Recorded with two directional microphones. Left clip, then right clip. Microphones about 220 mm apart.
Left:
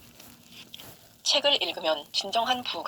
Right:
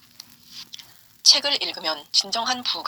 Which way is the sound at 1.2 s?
50° right (ahead or behind).